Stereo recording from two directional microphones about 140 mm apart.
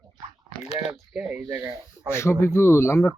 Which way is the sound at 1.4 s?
20° right (ahead or behind).